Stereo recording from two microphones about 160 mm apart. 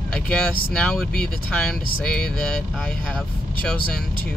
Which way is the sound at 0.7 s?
5° left (ahead or behind).